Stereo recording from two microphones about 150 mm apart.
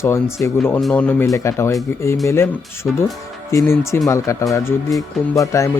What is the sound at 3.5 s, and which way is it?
Speech, 20° left (ahead or behind).